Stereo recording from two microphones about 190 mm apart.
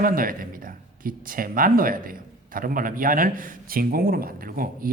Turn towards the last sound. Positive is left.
turn(degrees=-50)  # may be behind; listen again after turning